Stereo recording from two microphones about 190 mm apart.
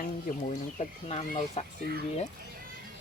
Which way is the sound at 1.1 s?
35° left (ahead or behind).